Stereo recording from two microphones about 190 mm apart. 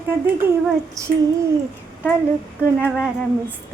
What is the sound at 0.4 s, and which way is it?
Speech, 10° right (ahead or behind).